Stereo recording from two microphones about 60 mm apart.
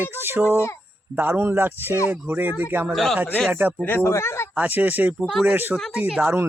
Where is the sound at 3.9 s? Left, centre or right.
Left.